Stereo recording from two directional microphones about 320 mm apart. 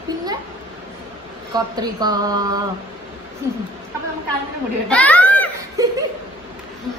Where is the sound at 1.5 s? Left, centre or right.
Centre.